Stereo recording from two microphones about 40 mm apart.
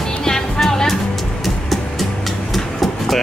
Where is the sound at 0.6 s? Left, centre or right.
Centre.